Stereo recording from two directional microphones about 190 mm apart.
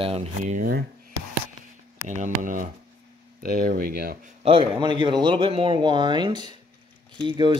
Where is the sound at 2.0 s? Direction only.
40° right (ahead or behind).